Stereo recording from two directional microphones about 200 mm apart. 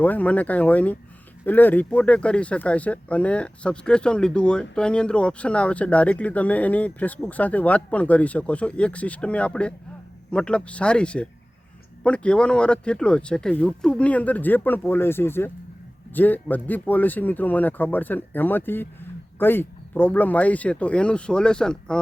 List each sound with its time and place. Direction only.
0.0 s speech: 10° left (ahead or behind)